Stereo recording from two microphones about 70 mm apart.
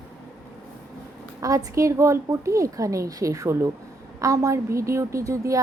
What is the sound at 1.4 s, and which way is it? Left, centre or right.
A woman's voice, right.